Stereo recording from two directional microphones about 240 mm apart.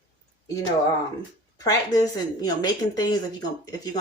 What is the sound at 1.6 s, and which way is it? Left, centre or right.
A woman's voice, centre.